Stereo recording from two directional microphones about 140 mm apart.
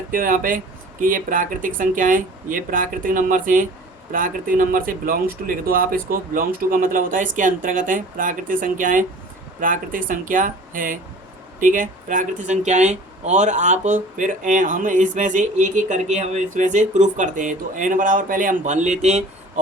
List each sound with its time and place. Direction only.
0.1 s speech: 80° right; by 19.2 s 55° right (ahead or behind)